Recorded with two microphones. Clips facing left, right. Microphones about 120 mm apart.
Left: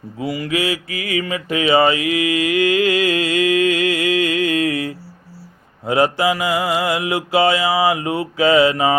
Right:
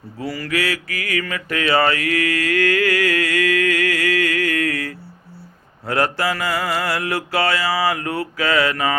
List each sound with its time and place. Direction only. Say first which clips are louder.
0.2 s mantra: left 2 dB; 15° left (ahead or behind)